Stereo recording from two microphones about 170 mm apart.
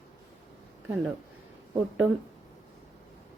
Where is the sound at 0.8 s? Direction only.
10° right (ahead or behind).